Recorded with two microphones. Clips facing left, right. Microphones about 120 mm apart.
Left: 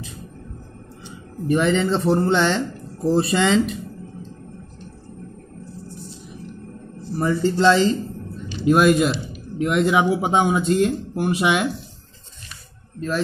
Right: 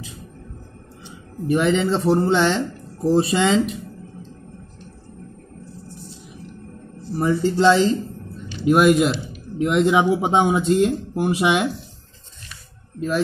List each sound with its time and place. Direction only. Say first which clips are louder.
1.5 s speech: even; 5° right (ahead or behind)
7.2 s speech: right 1 dB; 15° right (ahead or behind)